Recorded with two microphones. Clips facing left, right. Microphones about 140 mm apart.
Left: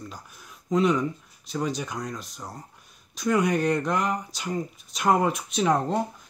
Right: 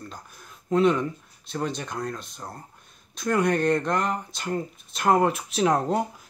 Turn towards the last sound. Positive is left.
turn(degrees=-5)  # may be behind; listen again after turning